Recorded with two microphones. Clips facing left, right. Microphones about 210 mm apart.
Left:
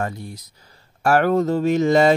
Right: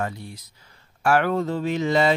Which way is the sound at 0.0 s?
45° left (ahead or behind).